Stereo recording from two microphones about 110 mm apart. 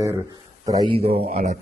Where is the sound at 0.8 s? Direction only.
65° right (ahead or behind); by 1.6 s 85° right.